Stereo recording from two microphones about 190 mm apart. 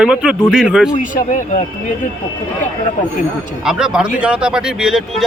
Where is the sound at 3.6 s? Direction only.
5° right (ahead or behind).